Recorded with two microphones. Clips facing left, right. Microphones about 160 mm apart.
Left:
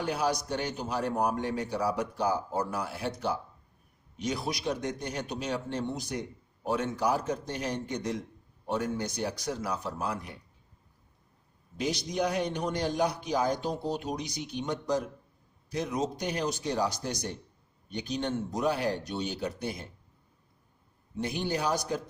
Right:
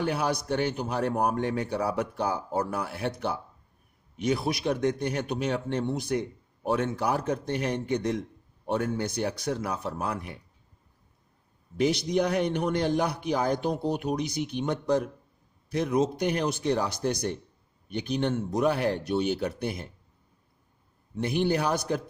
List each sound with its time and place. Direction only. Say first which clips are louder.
0.0 s a man's voice: right 2 dB; 60° right (ahead or behind)
11.8 s a man's voice: right 5 dB; 60° right (ahead or behind)
21.2 s a man's voice: right 5 dB; 60° right (ahead or behind)